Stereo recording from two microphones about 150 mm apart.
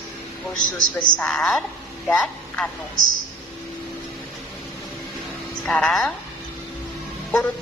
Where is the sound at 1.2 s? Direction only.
5° left (ahead or behind).